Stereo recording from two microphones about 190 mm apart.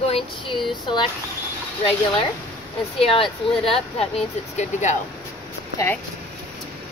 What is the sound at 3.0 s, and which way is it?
Speech, 30° left (ahead or behind).